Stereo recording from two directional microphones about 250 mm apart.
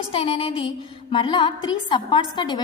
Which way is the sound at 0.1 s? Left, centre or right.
Left.